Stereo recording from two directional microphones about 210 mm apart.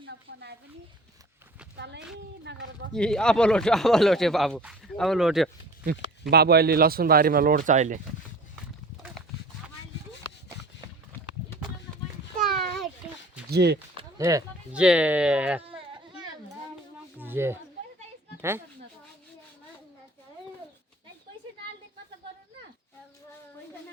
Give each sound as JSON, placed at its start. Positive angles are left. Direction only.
{"t": 0.0, "sound": "a sound", "side_deg": -55}
{"t": 2.4, "sound": "speech", "side_deg": -55}
{"t": 2.9, "sound": "speech", "side_deg": 5}
{"t": 6.3, "sound": "speech", "side_deg": -50}
{"t": 12.4, "sound": "a sound", "side_deg": 0}
{"t": 13.5, "sound": "speech", "side_deg": -50}
{"t": 14.2, "sound": "speech", "side_deg": -15}
{"t": 17.2, "sound": "speech", "side_deg": -10}